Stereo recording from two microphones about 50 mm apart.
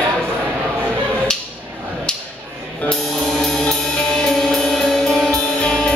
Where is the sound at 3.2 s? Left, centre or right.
Centre.